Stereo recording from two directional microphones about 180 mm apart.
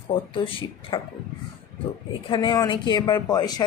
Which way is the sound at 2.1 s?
25° left (ahead or behind).